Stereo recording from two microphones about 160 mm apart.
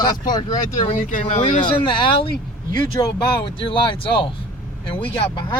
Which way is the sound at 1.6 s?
30° left (ahead or behind).